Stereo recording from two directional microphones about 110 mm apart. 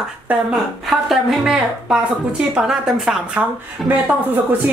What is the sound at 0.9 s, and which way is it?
Speech, 5° right (ahead or behind).